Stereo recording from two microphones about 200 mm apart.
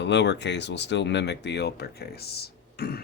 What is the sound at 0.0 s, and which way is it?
Speech, 60° left (ahead or behind).